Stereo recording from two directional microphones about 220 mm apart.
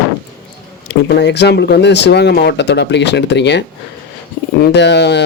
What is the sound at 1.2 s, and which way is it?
Speech, 50° left (ahead or behind).